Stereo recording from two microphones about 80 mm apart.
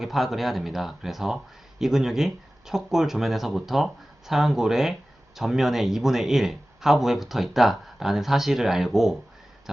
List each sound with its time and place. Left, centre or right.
0.0 s speech: centre